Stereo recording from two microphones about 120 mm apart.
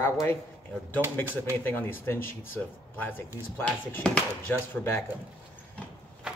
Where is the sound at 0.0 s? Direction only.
20° left (ahead or behind).